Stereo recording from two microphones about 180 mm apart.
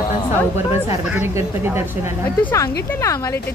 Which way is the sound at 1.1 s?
10° right (ahead or behind).